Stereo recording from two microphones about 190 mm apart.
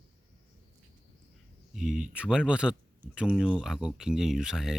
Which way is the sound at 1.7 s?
Centre (ahead or behind).